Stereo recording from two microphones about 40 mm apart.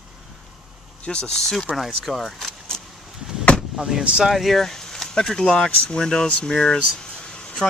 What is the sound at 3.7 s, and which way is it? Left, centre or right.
Speech, centre.